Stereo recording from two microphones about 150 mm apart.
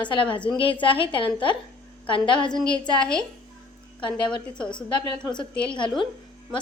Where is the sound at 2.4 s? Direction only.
5° left (ahead or behind).